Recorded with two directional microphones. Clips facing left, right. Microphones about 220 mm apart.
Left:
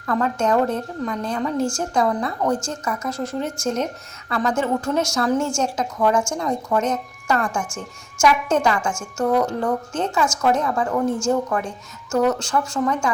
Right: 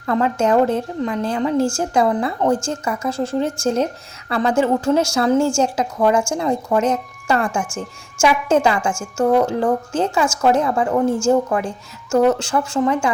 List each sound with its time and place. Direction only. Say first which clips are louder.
0.0 s a woman's voice: right 3 dB; 25° right (ahead or behind)